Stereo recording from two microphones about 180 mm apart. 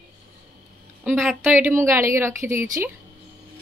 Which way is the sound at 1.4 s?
10° right (ahead or behind).